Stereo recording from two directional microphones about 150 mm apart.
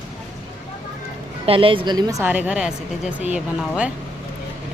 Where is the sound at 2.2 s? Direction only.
10° right (ahead or behind).